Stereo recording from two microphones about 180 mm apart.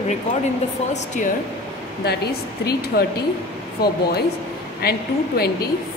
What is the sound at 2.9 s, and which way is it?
Speech, 60° left (ahead or behind).